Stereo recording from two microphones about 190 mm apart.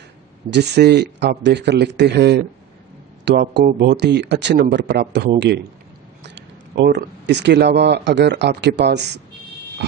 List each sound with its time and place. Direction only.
0.5 s speech: 60° right (ahead or behind)